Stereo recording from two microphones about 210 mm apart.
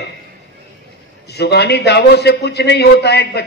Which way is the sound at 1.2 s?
50° left (ahead or behind).